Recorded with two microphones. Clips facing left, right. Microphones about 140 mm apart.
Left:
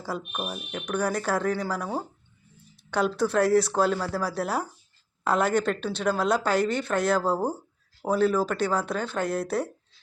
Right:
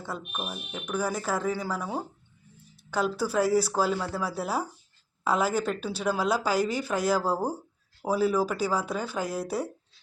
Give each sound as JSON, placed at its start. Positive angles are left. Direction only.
{"t": 0.0, "sound": "a woman's voice", "side_deg": 0}